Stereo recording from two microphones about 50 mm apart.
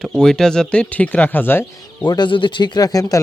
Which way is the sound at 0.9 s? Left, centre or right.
Left.